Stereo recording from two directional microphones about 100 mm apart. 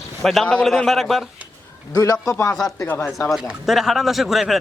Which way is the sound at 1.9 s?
40° left (ahead or behind).